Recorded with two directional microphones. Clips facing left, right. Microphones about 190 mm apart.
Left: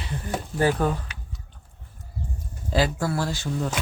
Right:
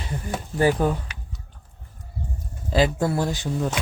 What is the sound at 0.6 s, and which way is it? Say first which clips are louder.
Speech: right 2 dB; 15° right (ahead or behind).